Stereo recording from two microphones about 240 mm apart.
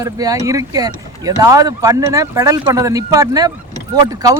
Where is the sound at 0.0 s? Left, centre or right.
Centre.